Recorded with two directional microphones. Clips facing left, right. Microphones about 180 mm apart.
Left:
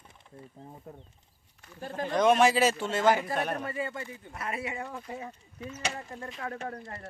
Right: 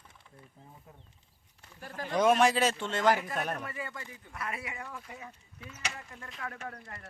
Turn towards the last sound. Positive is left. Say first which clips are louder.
# left 5 dB
turn(degrees=30)  # may be behind; listen again after turning